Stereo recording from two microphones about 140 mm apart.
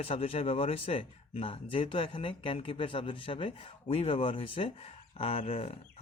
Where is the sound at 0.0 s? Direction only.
45° left (ahead or behind).